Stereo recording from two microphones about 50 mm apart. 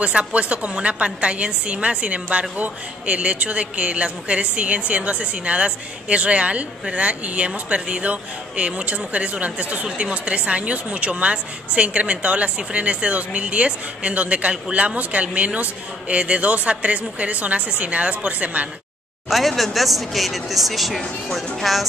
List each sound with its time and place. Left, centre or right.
0.0 s speech: right
19.2 s speech: centre